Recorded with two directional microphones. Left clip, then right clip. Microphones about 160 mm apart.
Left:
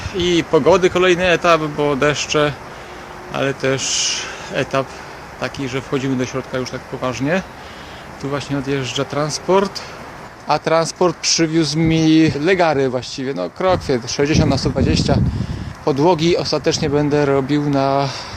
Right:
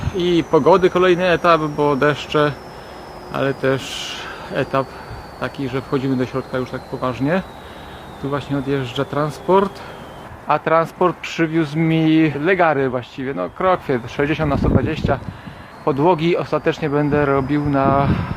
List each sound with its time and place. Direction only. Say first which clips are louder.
0.2 s speech: left 1 dB; 5° left (ahead or behind)
10.5 s speech: even; 20° left (ahead or behind)